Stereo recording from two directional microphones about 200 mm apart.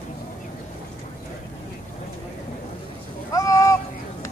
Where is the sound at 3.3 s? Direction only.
15° left (ahead or behind).